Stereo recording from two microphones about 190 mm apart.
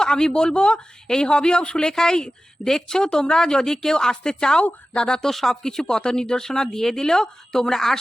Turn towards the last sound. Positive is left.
turn(degrees=0)  # may be behind; listen again after turning